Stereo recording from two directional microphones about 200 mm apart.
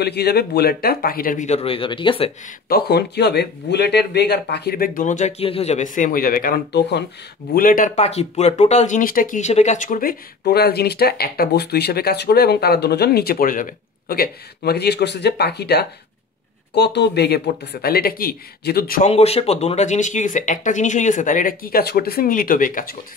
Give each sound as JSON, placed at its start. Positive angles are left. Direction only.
{"t": 0.0, "sound": "speech", "side_deg": 55}
{"t": 2.7, "sound": "speech", "side_deg": 55}
{"t": 7.5, "sound": "speech", "side_deg": 45}
{"t": 19.0, "sound": "speech", "side_deg": 30}